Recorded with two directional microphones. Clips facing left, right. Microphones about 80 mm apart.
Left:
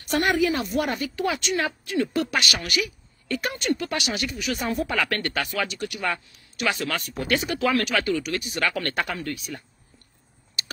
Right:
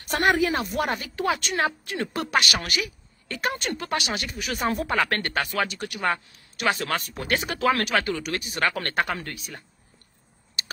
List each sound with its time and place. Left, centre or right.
0.1 s speech: right
6.5 s speech: right